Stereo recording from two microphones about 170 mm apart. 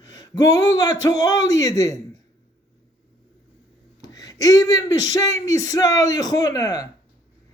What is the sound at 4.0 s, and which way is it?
A man's voice, 20° left (ahead or behind).